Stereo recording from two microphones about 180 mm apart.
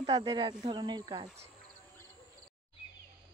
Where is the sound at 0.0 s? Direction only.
25° right (ahead or behind).